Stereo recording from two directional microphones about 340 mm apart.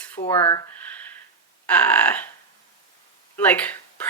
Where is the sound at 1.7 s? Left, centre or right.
Centre.